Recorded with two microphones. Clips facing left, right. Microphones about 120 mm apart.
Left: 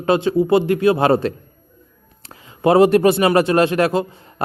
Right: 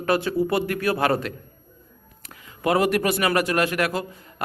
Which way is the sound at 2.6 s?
30° left (ahead or behind).